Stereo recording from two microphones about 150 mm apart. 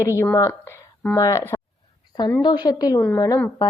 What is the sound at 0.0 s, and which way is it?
A woman's voice, 20° left (ahead or behind).